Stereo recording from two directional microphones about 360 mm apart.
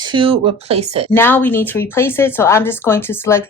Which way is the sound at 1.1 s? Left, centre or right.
Centre.